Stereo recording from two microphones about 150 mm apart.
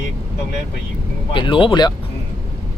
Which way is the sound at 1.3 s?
35° left (ahead or behind).